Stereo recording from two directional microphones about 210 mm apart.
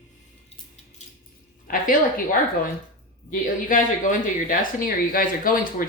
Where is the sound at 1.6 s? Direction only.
40° left (ahead or behind).